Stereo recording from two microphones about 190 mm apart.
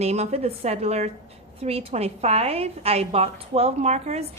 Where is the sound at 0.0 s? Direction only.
35° right (ahead or behind).